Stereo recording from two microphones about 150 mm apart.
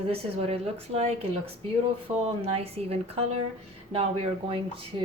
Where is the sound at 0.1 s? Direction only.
40° right (ahead or behind).